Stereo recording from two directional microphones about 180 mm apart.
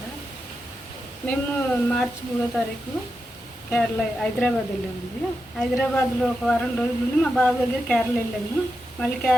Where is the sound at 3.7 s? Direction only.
5° left (ahead or behind).